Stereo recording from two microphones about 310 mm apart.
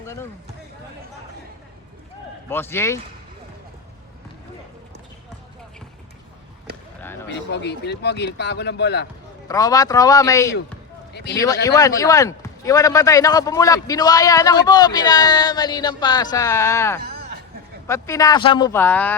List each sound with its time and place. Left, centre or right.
0.0 s basketball bounce: centre
2.5 s a man's voice: centre
7.3 s speech: left
9.5 s a man's voice: centre
11.1 s speech: left
11.3 s a man's voice: centre
17.0 s a sound: right
17.8 s a man's voice: centre